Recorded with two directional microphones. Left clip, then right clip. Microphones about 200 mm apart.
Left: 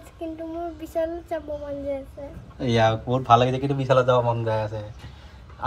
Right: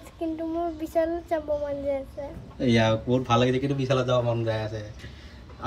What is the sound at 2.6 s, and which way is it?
Speech, 10° right (ahead or behind).